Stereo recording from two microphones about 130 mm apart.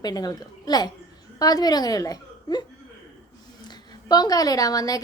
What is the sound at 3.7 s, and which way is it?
A woman's voice, 30° left (ahead or behind).